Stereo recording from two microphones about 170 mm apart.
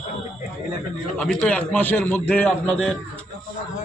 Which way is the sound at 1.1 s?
5° left (ahead or behind).